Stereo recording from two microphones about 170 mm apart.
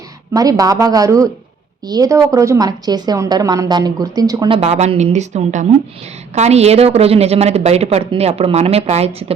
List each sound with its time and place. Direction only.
0.3 s a woman's voice: 20° right (ahead or behind); by 9.2 s 35° right (ahead or behind)